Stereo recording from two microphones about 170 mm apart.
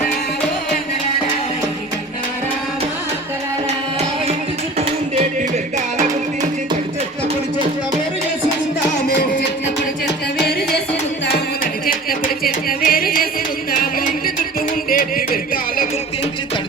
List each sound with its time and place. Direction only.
11.3 s music: 55° left (ahead or behind)
14.8 s music: 55° left (ahead or behind)